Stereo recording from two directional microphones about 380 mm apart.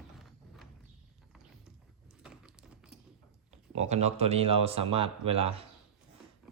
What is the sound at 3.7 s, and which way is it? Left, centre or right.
Speech, centre.